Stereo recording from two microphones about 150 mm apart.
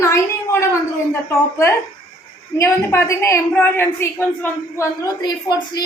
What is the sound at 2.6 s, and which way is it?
A woman's voice, 15° left (ahead or behind).